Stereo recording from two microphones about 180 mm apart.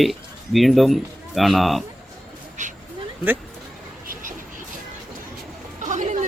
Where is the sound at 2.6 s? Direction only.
45° right (ahead or behind).